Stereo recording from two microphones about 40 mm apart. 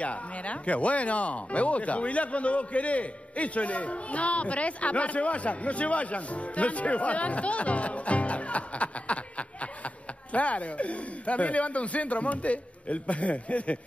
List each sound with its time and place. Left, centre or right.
0.0 s speech: left